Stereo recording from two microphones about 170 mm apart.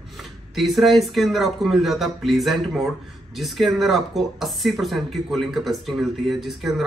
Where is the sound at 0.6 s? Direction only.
Centre (ahead or behind).